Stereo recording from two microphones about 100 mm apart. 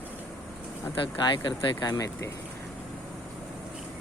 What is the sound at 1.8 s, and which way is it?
Speech, 35° left (ahead or behind).